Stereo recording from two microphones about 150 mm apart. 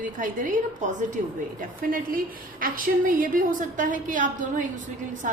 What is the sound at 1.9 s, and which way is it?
A woman's voice, 70° right (ahead or behind).